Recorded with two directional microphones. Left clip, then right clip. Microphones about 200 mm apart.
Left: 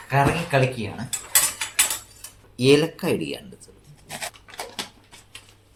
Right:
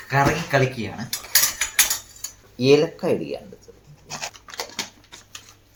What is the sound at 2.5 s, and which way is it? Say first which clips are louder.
Speech: right 1 dB; 50° left (ahead or behind).